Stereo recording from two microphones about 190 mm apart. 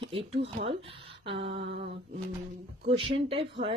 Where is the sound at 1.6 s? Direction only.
60° right (ahead or behind).